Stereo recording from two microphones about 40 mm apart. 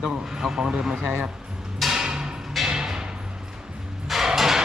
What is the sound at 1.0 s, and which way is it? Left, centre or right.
Speech, right.